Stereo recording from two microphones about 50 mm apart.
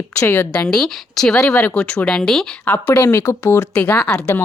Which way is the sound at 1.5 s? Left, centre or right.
Left.